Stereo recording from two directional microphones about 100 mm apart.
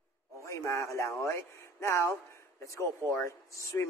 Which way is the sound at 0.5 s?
30° left (ahead or behind).